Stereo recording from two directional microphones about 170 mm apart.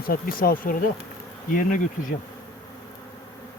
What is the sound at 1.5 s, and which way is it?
Bee, 50° left (ahead or behind).